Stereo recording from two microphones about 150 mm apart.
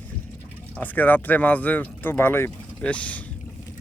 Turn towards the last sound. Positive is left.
turn(degrees=10)  # may be behind; listen again after turning